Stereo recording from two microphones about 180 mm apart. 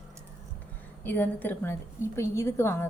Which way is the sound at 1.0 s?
10° left (ahead or behind).